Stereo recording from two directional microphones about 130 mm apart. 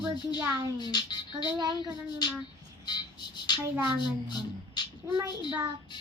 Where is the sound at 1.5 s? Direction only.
35° right (ahead or behind).